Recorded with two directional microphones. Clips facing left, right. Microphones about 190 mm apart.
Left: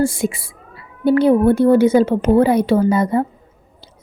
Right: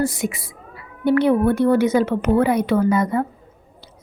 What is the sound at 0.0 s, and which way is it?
A woman's voice, 30° left (ahead or behind).